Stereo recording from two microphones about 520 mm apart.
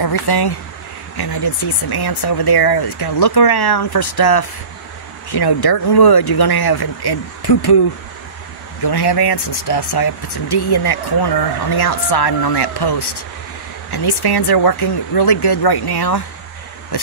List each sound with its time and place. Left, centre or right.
0.0 s speech: left
8.8 s speech: left